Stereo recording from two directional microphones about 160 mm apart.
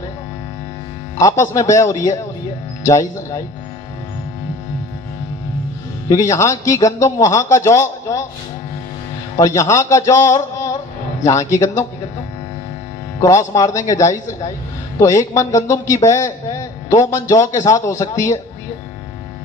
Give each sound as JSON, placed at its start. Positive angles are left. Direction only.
{"t": 1.2, "sound": "a man's voice", "side_deg": 20}
{"t": 6.1, "sound": "a man's voice", "side_deg": 20}
{"t": 9.6, "sound": "a man's voice", "side_deg": 20}
{"t": 13.1, "sound": "a man's voice", "side_deg": 20}